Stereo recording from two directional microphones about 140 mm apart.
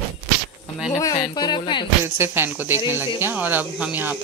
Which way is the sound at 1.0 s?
30° left (ahead or behind).